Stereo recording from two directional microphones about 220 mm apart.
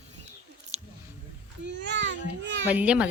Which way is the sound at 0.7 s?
70° right (ahead or behind).